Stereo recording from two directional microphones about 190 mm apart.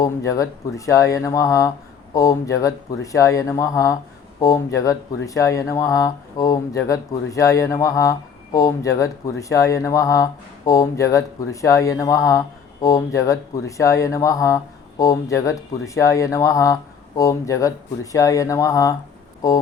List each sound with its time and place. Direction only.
0.0 s speech: 15° left (ahead or behind)